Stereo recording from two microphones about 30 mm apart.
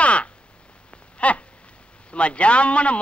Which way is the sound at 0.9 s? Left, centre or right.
Left.